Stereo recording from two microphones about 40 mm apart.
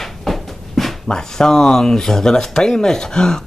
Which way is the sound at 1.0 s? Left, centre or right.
Centre.